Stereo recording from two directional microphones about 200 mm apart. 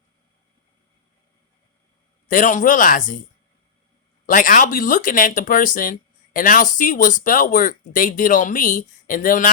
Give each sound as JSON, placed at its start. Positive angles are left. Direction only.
{"t": 2.3, "sound": "speech", "side_deg": 40}
{"t": 4.3, "sound": "speech", "side_deg": 45}